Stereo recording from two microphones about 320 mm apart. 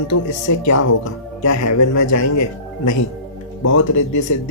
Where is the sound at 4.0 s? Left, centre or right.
Left.